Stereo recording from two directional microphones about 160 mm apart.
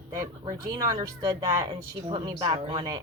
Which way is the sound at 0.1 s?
20° right (ahead or behind).